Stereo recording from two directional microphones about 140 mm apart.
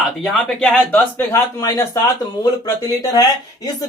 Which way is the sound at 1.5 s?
25° left (ahead or behind).